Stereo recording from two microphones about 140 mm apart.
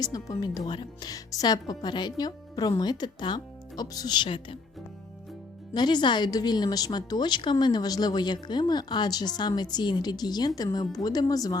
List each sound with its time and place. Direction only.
0.0 s a woman's voice: 25° left (ahead or behind)
5.7 s a woman's voice: 30° left (ahead or behind)